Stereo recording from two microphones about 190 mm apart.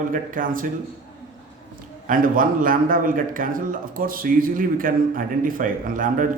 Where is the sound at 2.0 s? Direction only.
45° right (ahead or behind).